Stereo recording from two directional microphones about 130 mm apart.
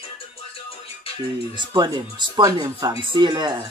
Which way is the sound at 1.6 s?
35° right (ahead or behind).